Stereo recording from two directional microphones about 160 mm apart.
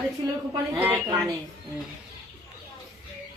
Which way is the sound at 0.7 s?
15° right (ahead or behind).